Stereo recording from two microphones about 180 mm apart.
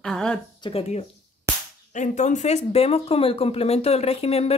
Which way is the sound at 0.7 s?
35° left (ahead or behind).